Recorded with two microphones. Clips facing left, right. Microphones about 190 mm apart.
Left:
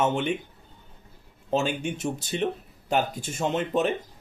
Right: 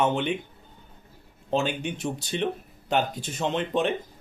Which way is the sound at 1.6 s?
45° left (ahead or behind).